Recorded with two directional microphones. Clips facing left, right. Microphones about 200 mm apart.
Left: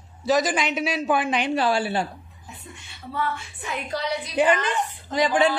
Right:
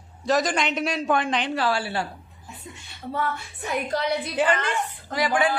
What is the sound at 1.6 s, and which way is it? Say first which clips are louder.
Speech: left 3 dB; 20° left (ahead or behind).